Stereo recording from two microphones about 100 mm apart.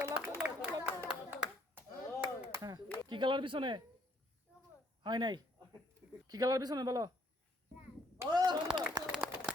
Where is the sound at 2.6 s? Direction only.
50° right (ahead or behind).